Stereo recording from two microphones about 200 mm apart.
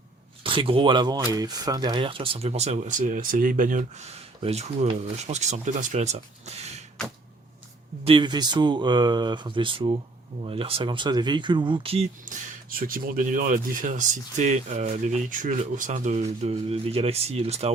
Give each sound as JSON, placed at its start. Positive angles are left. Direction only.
{"t": 0.4, "sound": "speech", "side_deg": -25}
{"t": 8.0, "sound": "speech", "side_deg": -25}
{"t": 12.2, "sound": "speech", "side_deg": -45}